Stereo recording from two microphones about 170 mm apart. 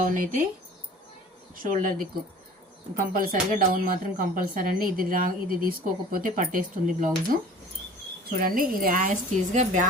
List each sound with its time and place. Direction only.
0.0 s speech: 50° right (ahead or behind)
1.6 s speech: 50° right (ahead or behind)
2.9 s a woman's voice: 55° right (ahead or behind)
8.4 s speech: 55° right (ahead or behind)